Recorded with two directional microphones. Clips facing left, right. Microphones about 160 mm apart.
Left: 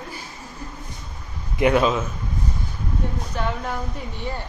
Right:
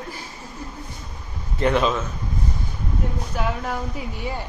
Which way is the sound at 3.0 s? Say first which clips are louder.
Right 1 dB; 5° right (ahead or behind).